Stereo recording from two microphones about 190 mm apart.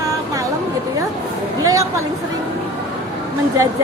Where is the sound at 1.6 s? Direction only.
15° right (ahead or behind).